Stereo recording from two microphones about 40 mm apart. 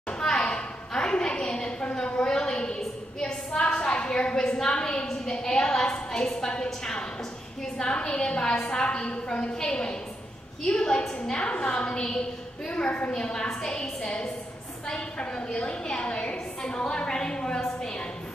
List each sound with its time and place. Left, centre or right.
0.2 s a sound: centre
7.8 s a woman's voice: left
13.1 s a woman's voice: centre